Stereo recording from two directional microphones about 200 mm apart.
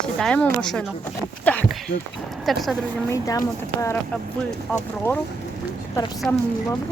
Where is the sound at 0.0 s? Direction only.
5° left (ahead or behind).